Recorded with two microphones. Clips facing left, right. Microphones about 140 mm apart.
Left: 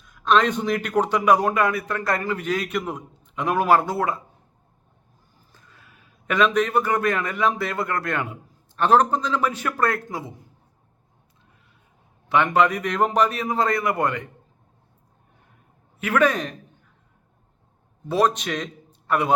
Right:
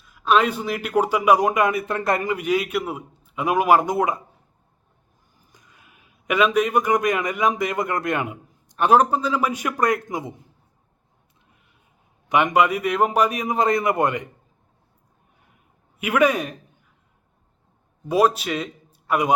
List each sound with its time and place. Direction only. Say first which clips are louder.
0.0 s a man's voice: even; 5° right (ahead or behind)
5.5 s a man's voice: even; 15° right (ahead or behind)
12.3 s a man's voice: right 1 dB; 15° right (ahead or behind)
16.0 s a man's voice: right 1 dB; 10° right (ahead or behind)
18.1 s a man's voice: right 2 dB; 10° right (ahead or behind)